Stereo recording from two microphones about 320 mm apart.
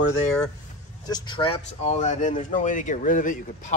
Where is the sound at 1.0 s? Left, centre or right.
Centre.